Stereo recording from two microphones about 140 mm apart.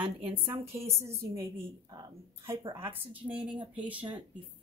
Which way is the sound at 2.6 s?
40° right (ahead or behind).